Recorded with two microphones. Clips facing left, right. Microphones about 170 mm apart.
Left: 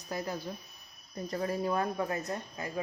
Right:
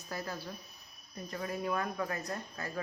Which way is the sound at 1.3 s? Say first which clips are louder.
Left 4 dB; 35° left (ahead or behind).